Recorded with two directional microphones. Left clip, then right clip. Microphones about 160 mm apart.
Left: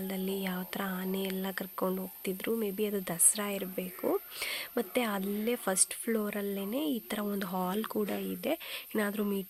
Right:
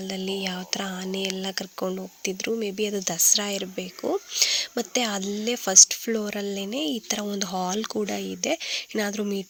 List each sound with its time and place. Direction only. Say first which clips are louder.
0.1 s speech: right 8 dB; 25° right (ahead or behind)